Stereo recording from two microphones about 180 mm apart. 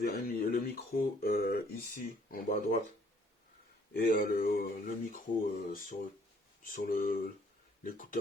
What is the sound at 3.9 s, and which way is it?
Speech, 50° left (ahead or behind).